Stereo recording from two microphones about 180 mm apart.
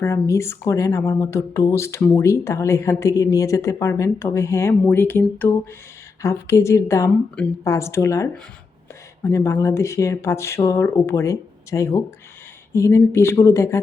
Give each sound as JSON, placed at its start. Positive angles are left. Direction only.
{"t": 0.0, "sound": "speech", "side_deg": 15}